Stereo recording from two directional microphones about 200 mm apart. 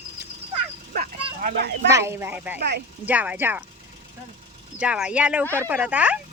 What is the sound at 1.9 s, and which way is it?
Speech, 15° right (ahead or behind).